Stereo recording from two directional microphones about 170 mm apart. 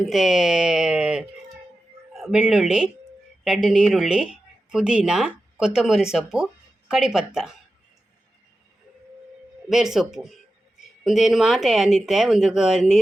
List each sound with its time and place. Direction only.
0.0 s speech: centre (ahead or behind)
9.6 s speech: centre (ahead or behind)